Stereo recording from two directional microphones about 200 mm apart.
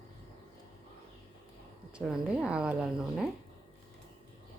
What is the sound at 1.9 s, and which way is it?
A woman's voice, 5° right (ahead or behind).